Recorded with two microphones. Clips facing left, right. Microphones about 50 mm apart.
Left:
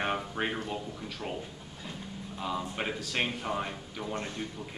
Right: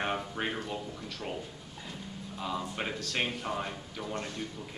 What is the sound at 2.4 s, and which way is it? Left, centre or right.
Speech, centre.